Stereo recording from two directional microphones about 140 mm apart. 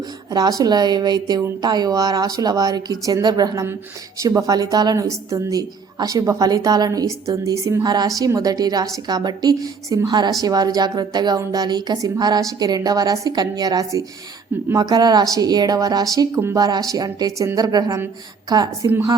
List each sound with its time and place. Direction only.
0.3 s a woman's voice: 25° right (ahead or behind)